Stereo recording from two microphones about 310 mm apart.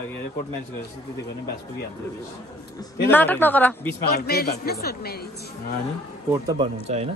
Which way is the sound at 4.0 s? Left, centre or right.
Left.